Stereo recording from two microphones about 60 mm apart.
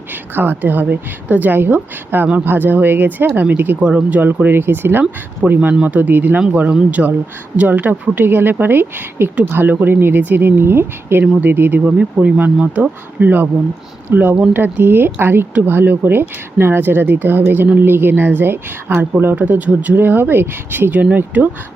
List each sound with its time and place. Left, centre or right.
0.3 s speech: right
3.8 s speech: right
4.4 s speech: right
5.4 s speech: right
11.9 s speech: right